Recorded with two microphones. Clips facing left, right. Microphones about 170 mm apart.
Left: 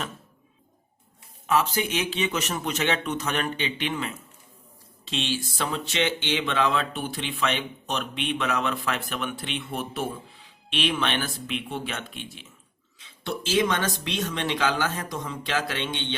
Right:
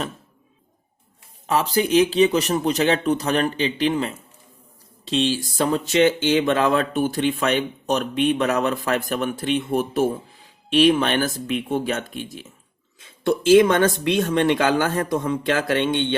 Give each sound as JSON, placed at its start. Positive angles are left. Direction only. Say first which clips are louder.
{"t": 1.5, "sound": "speech", "louder": "right 4 dB", "side_deg": -35}